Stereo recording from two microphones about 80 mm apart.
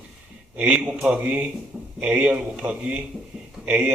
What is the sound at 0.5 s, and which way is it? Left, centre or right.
A man's voice, centre.